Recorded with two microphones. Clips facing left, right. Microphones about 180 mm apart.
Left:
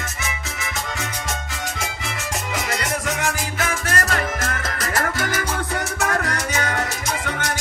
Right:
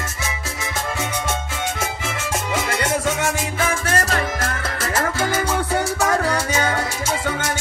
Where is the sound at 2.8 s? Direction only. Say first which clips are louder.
Right 4 dB; 25° right (ahead or behind).